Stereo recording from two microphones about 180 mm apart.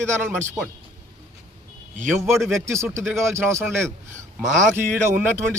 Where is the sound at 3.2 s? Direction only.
15° right (ahead or behind).